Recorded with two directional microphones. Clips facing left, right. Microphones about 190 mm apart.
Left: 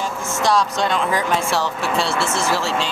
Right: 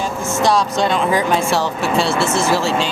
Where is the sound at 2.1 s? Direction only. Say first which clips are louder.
Right 4 dB; 30° right (ahead or behind).